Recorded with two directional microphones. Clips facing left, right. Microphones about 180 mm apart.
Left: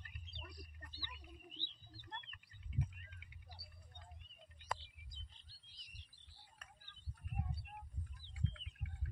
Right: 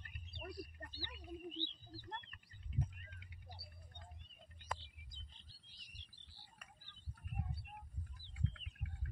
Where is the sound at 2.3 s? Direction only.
45° right (ahead or behind).